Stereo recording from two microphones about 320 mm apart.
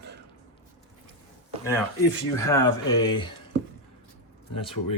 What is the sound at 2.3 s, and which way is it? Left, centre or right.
Speech, centre.